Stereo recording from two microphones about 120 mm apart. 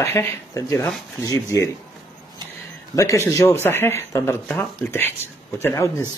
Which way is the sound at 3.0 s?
25° left (ahead or behind).